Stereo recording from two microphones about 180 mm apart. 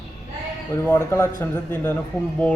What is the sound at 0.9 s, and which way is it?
Speech, 15° left (ahead or behind).